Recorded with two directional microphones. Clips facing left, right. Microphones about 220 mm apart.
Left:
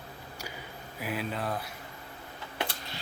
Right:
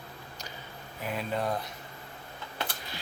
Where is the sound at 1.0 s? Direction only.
5° left (ahead or behind).